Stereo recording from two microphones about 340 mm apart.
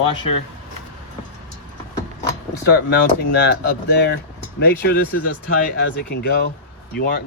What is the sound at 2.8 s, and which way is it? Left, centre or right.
Speech, left.